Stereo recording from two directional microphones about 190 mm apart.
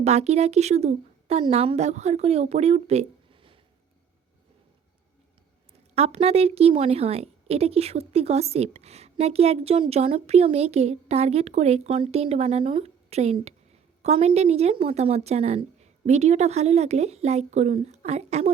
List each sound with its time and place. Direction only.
0.0 s a woman's voice: 35° right (ahead or behind)
5.9 s a woman's voice: 35° right (ahead or behind)